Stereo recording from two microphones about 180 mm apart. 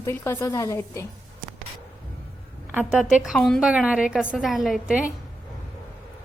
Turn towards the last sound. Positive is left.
turn(degrees=-5)  # may be behind; listen again after turning